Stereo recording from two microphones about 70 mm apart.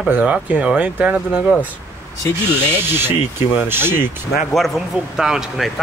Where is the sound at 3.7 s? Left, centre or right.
Right.